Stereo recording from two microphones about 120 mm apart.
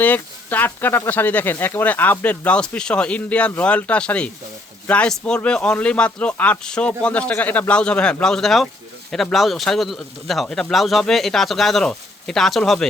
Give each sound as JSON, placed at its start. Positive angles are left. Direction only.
{"t": 0.0, "sound": "speech", "side_deg": 15}